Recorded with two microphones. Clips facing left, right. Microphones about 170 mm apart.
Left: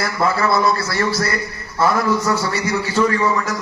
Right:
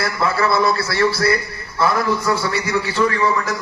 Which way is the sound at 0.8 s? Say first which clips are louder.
Right 2 dB; 60° right (ahead or behind).